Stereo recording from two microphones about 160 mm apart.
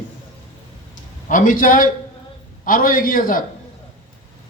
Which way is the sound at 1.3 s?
55° left (ahead or behind).